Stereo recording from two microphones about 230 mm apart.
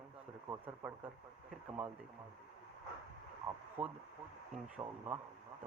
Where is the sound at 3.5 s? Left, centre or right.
Centre.